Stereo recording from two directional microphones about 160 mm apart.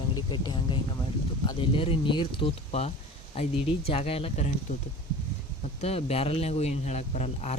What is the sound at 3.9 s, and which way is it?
Speech, 40° left (ahead or behind).